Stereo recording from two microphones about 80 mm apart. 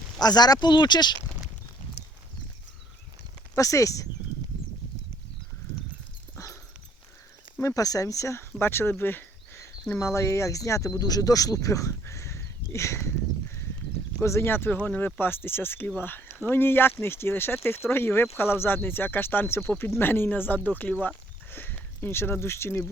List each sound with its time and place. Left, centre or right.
0.2 s speech: left
3.5 s speech: left
6.3 s dog: left
7.6 s speech: left
8.5 s speech: left
10.0 s speech: left
14.2 s speech: left